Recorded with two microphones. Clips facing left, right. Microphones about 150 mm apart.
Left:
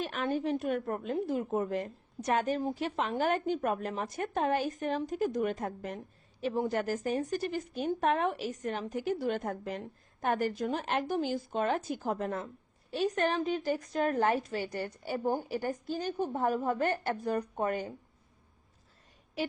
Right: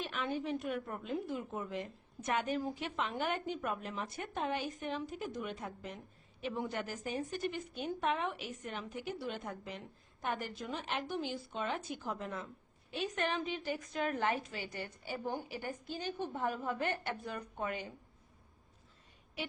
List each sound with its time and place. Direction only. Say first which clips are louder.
0.0 s a woman's voice: left 6 dB; 45° left (ahead or behind)
6.4 s a woman's voice: left 7 dB; 35° left (ahead or behind)